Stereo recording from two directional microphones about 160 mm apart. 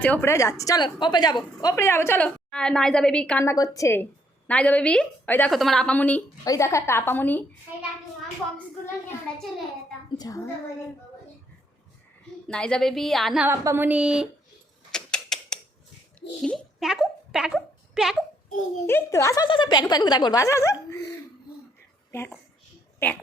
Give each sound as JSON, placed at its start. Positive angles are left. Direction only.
{"t": 0.0, "sound": "a woman's voice", "side_deg": 10}
{"t": 3.4, "sound": "a woman's voice", "side_deg": 20}
{"t": 4.4, "sound": "a woman's voice", "side_deg": 10}
{"t": 6.4, "sound": "a woman's voice", "side_deg": 20}
{"t": 10.2, "sound": "a woman's voice", "side_deg": 20}
{"t": 12.5, "sound": "a woman's voice", "side_deg": 5}
{"t": 13.5, "sound": "speech", "side_deg": -15}
{"t": 14.9, "sound": "mechanisms", "side_deg": 5}
{"t": 16.8, "sound": "a woman's voice", "side_deg": -5}
{"t": 18.9, "sound": "a woman's voice", "side_deg": 15}
{"t": 23.0, "sound": "speech", "side_deg": 10}